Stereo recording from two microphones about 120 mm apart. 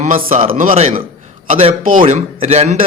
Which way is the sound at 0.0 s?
75° right (ahead or behind).